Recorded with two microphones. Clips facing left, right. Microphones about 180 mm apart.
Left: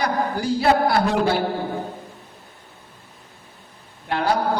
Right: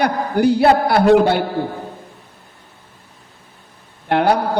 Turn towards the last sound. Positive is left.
turn(degrees=-65)  # may be behind; listen again after turning